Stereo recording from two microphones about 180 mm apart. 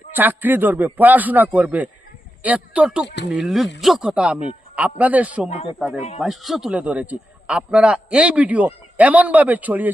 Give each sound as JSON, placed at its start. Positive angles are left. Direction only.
{"t": 0.2, "sound": "a man's voice", "side_deg": -10}